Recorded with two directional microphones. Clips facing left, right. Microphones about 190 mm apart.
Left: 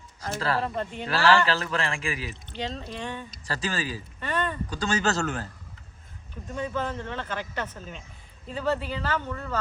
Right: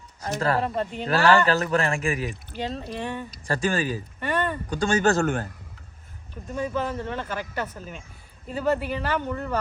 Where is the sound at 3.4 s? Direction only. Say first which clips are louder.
Right 6 dB; 50° right (ahead or behind).